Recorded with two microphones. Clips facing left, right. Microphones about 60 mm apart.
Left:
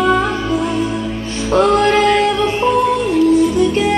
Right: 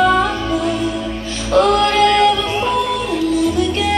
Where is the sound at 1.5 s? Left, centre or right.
Left.